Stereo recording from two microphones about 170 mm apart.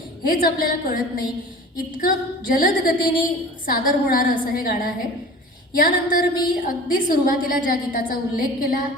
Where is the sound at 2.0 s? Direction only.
55° left (ahead or behind).